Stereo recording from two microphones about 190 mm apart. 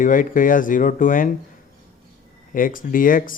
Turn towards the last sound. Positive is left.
turn(degrees=45)  # may be behind; listen again after turning